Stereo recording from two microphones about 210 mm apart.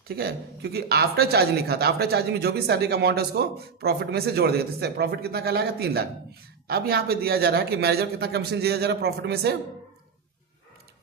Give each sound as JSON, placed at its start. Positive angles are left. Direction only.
{"t": 0.1, "sound": "speech", "side_deg": -50}